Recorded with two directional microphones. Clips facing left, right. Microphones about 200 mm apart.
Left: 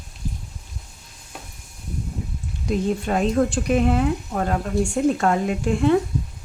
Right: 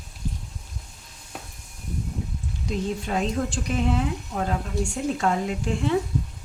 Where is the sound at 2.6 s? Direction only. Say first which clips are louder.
Left 6 dB; 55° left (ahead or behind).